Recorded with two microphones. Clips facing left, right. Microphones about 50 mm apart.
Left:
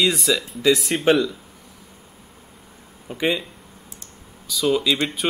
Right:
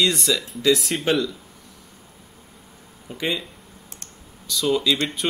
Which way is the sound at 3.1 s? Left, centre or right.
Centre.